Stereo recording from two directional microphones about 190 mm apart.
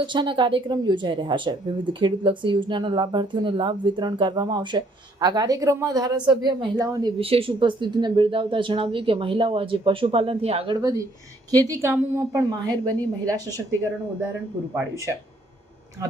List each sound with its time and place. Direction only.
0.0 s speech: 25° right (ahead or behind)
7.2 s speech: 30° right (ahead or behind)
10.8 s a woman's voice: 20° right (ahead or behind)
14.8 s a woman's voice: 15° right (ahead or behind)